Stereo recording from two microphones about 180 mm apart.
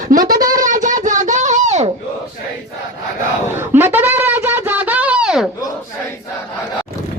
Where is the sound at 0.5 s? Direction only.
45° right (ahead or behind).